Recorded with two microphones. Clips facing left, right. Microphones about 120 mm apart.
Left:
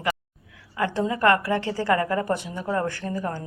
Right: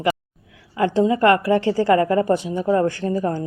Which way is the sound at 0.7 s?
25° right (ahead or behind).